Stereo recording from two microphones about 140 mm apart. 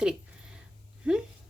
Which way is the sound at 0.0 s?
5° right (ahead or behind).